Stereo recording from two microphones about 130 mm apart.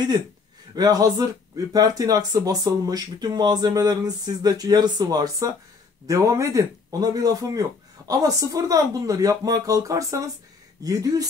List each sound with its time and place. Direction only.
0.7 s speech: 30° right (ahead or behind)